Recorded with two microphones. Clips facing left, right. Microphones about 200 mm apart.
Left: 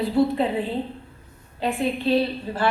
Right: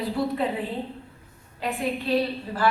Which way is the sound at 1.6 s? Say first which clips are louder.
Left 4 dB; 30° left (ahead or behind).